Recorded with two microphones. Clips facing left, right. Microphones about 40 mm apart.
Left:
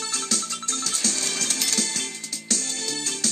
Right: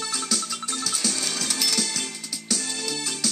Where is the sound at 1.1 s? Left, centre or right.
Centre.